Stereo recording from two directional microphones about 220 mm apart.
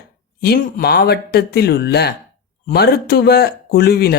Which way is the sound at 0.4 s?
45° left (ahead or behind).